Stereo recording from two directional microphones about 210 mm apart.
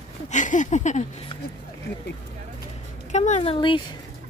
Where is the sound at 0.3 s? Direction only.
35° left (ahead or behind).